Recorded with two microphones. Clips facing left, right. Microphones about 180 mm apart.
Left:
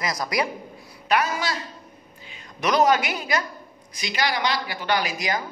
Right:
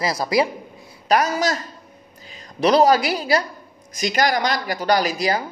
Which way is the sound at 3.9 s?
45° right (ahead or behind).